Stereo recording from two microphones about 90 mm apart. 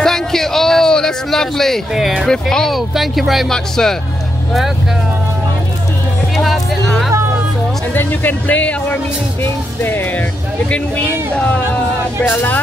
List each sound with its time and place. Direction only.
0.0 s a sound: 5° left (ahead or behind)
2.5 s speech: centre (ahead or behind)
6.3 s music: centre (ahead or behind)
7.9 s speech: 20° left (ahead or behind)
11.3 s speech: 15° left (ahead or behind)